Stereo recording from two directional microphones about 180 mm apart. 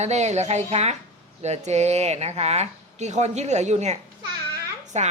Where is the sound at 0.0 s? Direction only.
40° right (ahead or behind).